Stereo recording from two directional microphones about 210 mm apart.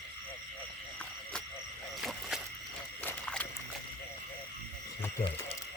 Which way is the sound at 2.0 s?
Centre (ahead or behind).